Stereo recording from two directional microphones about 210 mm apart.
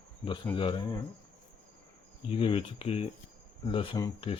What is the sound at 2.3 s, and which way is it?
A man's voice, 25° left (ahead or behind).